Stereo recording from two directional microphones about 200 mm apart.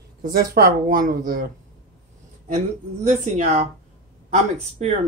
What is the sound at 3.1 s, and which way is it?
Speech, 35° right (ahead or behind).